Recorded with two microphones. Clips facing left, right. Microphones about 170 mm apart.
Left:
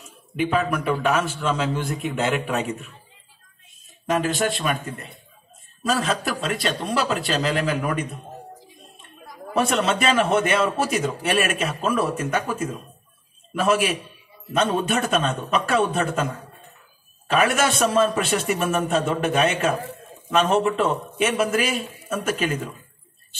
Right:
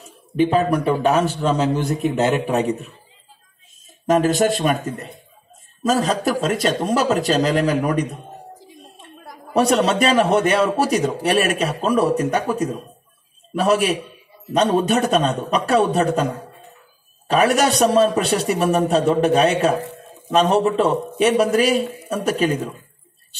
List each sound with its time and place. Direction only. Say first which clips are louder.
0.0 s a man's voice: right 7 dB; 40° right (ahead or behind)
4.1 s a man's voice: right 6 dB; 40° right (ahead or behind)
9.5 s a man's voice: right 5 dB; 40° right (ahead or behind)
17.3 s a man's voice: right 4 dB; 35° right (ahead or behind)